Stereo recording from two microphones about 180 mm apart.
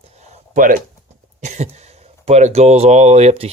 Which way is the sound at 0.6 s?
50° right (ahead or behind).